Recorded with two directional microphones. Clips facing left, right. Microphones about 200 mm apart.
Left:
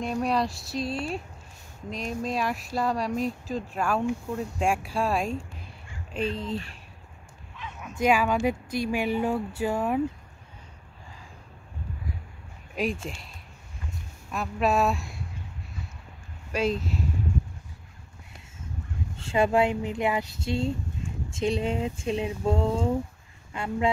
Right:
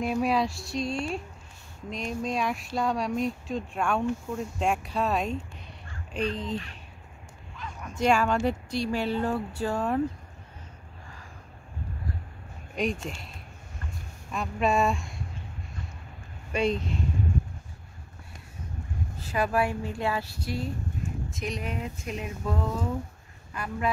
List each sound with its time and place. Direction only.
0.0 s speech: 5° right (ahead or behind)
7.5 s bow-wow: 5° left (ahead or behind)
8.0 s speech: 5° left (ahead or behind)
8.6 s speech: 45° left (ahead or behind)
8.9 s speech: 10° left (ahead or behind)
12.7 s speech: 5° left (ahead or behind)
14.3 s speech: 5° left (ahead or behind)
16.5 s speech: centre (ahead or behind)
19.1 s speech: 25° left (ahead or behind)